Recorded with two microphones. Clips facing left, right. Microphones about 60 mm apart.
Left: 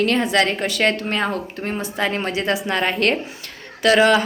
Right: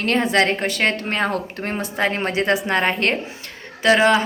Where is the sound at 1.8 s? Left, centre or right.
Right.